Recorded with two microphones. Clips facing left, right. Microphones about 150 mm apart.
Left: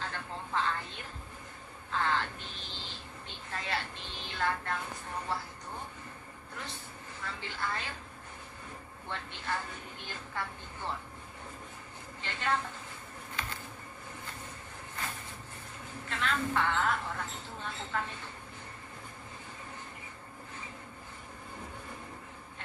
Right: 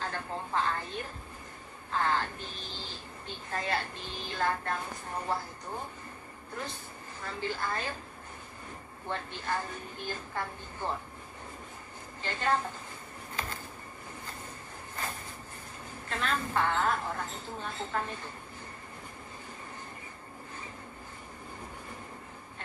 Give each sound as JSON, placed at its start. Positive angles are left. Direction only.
{"t": 0.0, "sound": "a sound", "side_deg": -40}
{"t": 5.3, "sound": "speech", "side_deg": -45}
{"t": 7.2, "sound": "a woman's voice", "side_deg": -40}
{"t": 9.1, "sound": "a woman's voice", "side_deg": -40}
{"t": 12.2, "sound": "a woman's voice", "side_deg": -40}
{"t": 16.1, "sound": "a woman's voice", "side_deg": -40}